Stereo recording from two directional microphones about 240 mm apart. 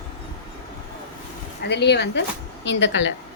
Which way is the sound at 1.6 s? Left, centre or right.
Left.